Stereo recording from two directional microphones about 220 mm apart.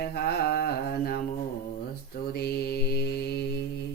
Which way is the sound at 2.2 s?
45° left (ahead or behind).